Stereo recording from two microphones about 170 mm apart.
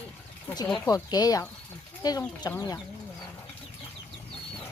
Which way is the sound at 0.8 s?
20° left (ahead or behind).